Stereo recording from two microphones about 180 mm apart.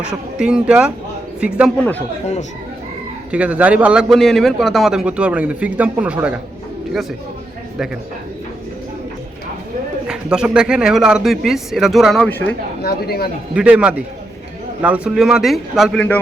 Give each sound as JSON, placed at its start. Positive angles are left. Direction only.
{"t": 0.0, "sound": "a man's voice", "side_deg": -5}
{"t": 3.3, "sound": "a man's voice", "side_deg": -5}
{"t": 10.1, "sound": "a man's voice", "side_deg": -5}
{"t": 12.8, "sound": "speech", "side_deg": 60}
{"t": 13.5, "sound": "a man's voice", "side_deg": -5}